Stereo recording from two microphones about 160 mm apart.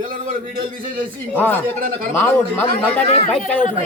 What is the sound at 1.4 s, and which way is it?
Speech, 10° left (ahead or behind).